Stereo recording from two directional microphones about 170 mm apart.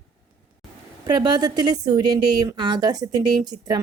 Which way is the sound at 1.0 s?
25° right (ahead or behind).